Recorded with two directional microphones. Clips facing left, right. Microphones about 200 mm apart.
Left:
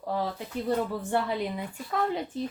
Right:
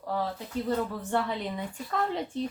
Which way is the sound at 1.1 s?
5° left (ahead or behind).